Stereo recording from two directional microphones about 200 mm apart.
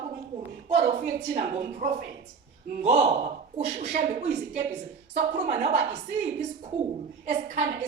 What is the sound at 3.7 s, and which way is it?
A woman's voice, 40° right (ahead or behind).